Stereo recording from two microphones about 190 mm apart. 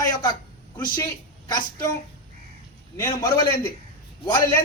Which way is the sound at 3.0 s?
20° left (ahead or behind).